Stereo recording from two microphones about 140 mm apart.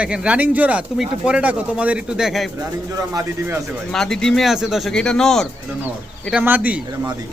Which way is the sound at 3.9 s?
5° left (ahead or behind).